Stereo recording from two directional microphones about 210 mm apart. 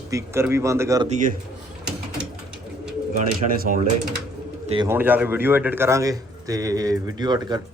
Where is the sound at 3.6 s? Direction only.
40° right (ahead or behind).